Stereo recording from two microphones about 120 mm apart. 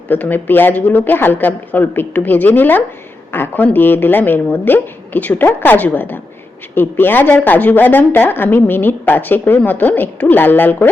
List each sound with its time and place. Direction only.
0.1 s a woman's voice: 15° left (ahead or behind)